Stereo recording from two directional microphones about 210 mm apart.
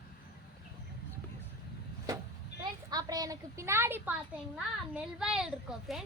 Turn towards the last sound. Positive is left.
turn(degrees=0)  # may be behind; listen again after turning